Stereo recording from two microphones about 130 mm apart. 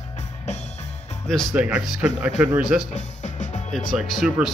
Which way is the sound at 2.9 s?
70° left (ahead or behind).